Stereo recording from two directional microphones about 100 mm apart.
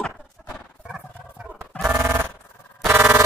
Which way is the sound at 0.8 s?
10° right (ahead or behind).